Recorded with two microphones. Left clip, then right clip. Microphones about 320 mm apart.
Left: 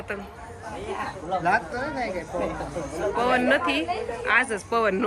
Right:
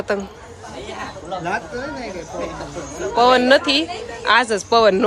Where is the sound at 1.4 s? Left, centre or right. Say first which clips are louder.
Left 1 dB; centre.